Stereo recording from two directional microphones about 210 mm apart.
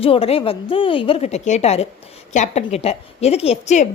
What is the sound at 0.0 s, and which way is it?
A woman's voice, 25° left (ahead or behind).